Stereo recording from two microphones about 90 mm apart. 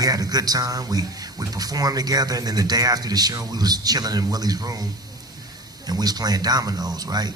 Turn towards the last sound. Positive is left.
turn(degrees=-50)  # may be behind; listen again after turning